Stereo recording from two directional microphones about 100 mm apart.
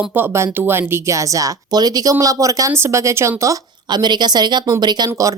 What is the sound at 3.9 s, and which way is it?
Speech, 45° right (ahead or behind).